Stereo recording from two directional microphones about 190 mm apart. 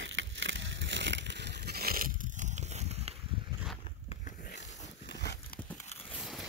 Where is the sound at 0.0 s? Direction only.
75° right (ahead or behind); by 3.2 s 35° right (ahead or behind).